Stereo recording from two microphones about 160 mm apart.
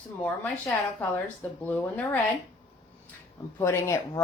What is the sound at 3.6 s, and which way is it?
Speech, 15° left (ahead or behind).